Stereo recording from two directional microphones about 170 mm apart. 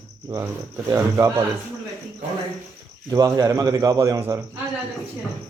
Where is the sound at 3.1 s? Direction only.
20° right (ahead or behind).